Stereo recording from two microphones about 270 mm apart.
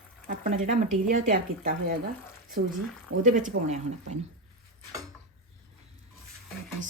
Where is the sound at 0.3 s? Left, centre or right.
Right.